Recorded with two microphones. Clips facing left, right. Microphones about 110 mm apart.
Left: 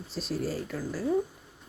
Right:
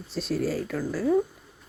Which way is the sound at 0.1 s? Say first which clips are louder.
Right 5 dB; 70° right (ahead or behind).